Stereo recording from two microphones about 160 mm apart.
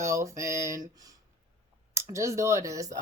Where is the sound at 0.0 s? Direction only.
20° right (ahead or behind).